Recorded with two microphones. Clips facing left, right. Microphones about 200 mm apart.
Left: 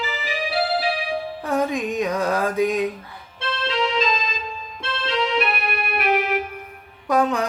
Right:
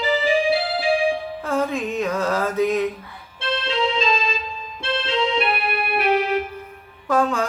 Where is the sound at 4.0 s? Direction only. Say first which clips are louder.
Right 1 dB; 30° right (ahead or behind).